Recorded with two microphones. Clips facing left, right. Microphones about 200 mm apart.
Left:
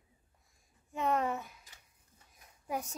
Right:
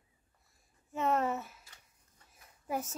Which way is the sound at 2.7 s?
5° right (ahead or behind).